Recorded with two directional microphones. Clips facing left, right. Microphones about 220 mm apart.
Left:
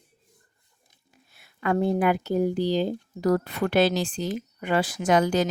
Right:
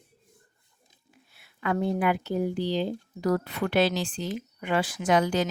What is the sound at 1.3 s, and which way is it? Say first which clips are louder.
Speech: left 3 dB; 45° left (ahead or behind).